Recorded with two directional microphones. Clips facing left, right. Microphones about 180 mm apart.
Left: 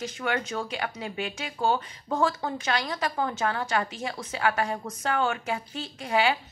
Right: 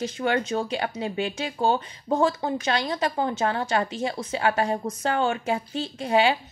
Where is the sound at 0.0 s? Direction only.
30° right (ahead or behind).